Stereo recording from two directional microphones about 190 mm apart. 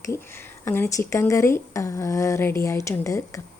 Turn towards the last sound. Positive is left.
turn(degrees=15)  # may be behind; listen again after turning